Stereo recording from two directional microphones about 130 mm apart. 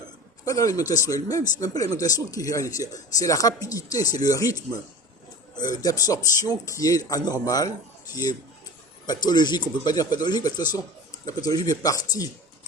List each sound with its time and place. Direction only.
0.4 s speech: 25° left (ahead or behind)